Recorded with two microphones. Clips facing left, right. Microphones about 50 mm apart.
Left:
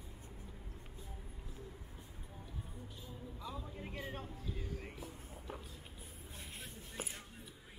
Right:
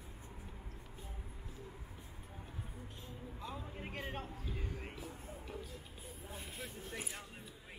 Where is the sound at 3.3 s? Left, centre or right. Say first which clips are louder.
Right 1 dB; right.